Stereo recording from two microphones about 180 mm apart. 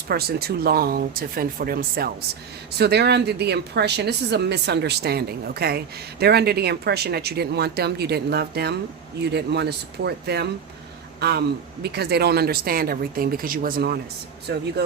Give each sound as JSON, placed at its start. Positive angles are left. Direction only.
{"t": 0.1, "sound": "a woman's voice", "side_deg": -60}
{"t": 2.7, "sound": "a woman's voice", "side_deg": -65}